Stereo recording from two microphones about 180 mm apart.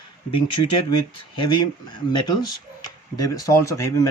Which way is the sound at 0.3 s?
30° left (ahead or behind).